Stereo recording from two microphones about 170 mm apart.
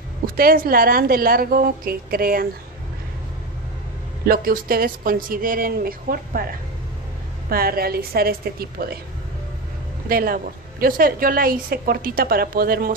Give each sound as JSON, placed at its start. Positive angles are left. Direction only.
{"t": 0.4, "sound": "a woman's voice", "side_deg": -60}
{"t": 4.3, "sound": "a woman's voice", "side_deg": -60}
{"t": 7.4, "sound": "a woman's voice", "side_deg": -60}
{"t": 10.0, "sound": "a woman's voice", "side_deg": -60}